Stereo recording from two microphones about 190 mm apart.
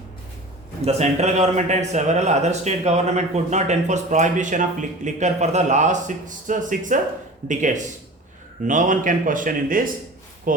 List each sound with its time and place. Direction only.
0.8 s a man's voice: 35° right (ahead or behind)